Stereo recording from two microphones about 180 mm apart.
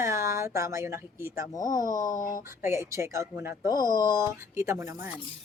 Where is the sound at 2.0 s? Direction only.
45° left (ahead or behind).